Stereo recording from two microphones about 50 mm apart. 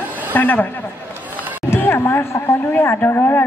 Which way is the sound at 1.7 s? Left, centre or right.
Left.